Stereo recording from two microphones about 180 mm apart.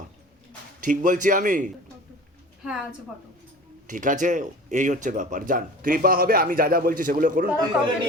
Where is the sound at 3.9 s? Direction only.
45° right (ahead or behind).